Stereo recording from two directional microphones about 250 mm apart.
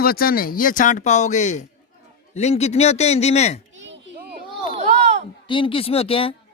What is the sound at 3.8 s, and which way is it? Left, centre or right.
Children playing, right.